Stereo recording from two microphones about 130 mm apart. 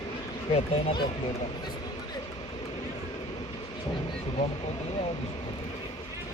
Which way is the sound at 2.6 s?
65° left (ahead or behind).